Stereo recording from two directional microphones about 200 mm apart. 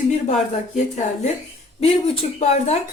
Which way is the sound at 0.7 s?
35° left (ahead or behind).